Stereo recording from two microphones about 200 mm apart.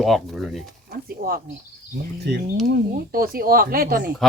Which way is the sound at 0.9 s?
50° right (ahead or behind).